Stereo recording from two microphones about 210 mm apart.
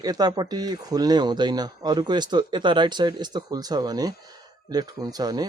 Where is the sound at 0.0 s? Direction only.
20° right (ahead or behind).